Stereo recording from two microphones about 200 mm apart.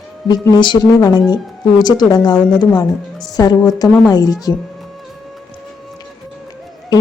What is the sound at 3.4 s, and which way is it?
A woman's voice, 20° left (ahead or behind).